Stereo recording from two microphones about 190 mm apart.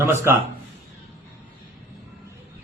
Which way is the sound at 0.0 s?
15° right (ahead or behind).